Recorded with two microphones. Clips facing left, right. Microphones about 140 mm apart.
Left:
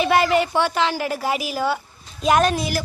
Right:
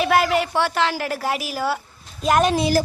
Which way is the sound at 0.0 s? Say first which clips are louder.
Left 1 dB; centre (ahead or behind).